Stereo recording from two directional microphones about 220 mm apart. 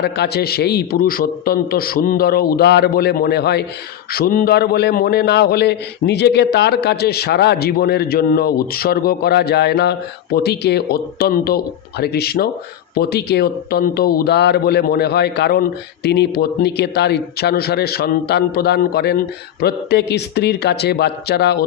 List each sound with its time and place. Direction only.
0.0 s a man's voice: 45° left (ahead or behind)